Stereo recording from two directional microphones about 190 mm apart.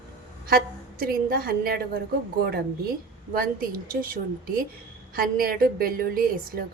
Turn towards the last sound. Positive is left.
turn(degrees=-50)  # may be behind; listen again after turning